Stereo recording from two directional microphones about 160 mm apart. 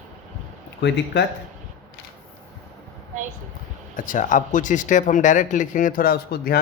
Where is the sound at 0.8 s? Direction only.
90° left.